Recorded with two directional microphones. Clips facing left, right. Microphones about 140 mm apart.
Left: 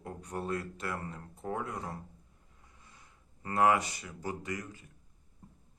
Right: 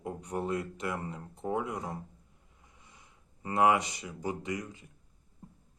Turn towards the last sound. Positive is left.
turn(degrees=-20)  # may be behind; listen again after turning